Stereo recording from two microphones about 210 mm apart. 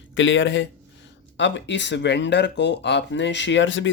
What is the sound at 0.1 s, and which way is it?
Speech, 65° left (ahead or behind).